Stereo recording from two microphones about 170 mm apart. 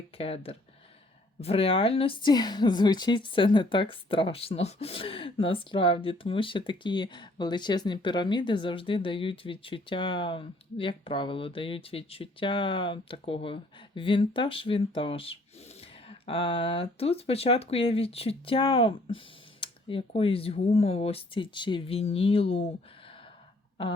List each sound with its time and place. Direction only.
0.2 s a woman's voice: 35° left (ahead or behind)